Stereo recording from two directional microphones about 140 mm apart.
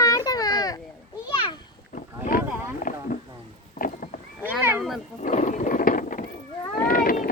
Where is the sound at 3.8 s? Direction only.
70° left (ahead or behind).